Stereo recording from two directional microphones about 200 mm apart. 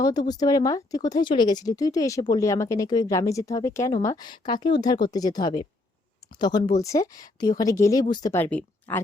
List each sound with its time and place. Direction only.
0.0 s speech: 20° left (ahead or behind)